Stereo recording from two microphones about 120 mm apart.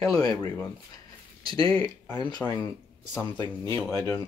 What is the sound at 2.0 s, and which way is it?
Speech, 35° left (ahead or behind).